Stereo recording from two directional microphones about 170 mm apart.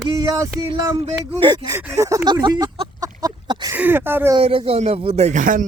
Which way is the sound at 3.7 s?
10° right (ahead or behind).